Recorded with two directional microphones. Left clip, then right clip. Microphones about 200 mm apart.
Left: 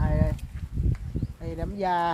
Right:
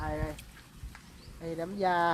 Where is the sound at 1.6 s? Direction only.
35° left (ahead or behind).